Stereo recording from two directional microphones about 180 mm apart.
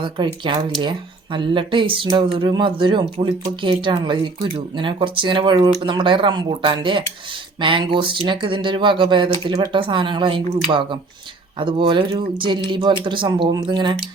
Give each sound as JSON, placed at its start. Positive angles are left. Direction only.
{"t": 0.0, "sound": "speech", "side_deg": -25}